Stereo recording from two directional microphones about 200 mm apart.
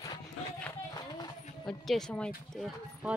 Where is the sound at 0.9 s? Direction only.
20° left (ahead or behind).